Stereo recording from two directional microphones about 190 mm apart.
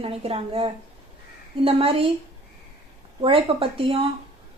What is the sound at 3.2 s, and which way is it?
Speech, 30° right (ahead or behind).